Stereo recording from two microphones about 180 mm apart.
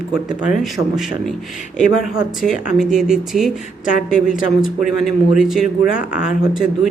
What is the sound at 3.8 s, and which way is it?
Speech, 50° left (ahead or behind).